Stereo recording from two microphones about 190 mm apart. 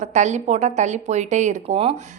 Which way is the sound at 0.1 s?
40° right (ahead or behind).